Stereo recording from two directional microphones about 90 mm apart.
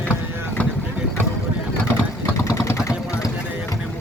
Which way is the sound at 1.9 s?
30° left (ahead or behind).